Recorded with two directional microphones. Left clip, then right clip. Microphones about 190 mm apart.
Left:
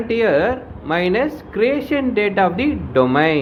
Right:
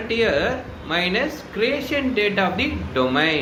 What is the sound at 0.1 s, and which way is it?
Speech, 55° left (ahead or behind).